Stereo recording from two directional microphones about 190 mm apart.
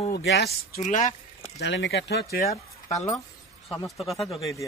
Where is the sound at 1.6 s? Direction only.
70° left (ahead or behind).